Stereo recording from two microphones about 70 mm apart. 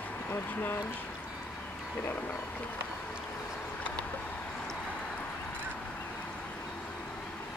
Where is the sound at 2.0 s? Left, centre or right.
Left.